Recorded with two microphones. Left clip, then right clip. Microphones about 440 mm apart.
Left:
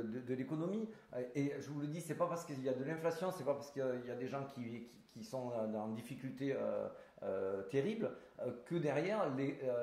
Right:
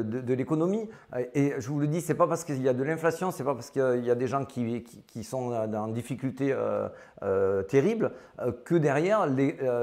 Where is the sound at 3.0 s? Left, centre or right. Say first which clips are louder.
Right 8 dB; right.